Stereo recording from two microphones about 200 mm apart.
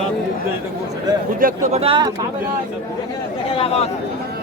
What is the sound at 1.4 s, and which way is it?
Speech, 35° right (ahead or behind).